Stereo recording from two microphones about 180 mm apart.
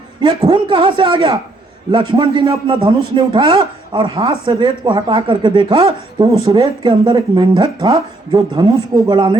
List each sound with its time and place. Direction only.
0.2 s a man's voice: 25° right (ahead or behind)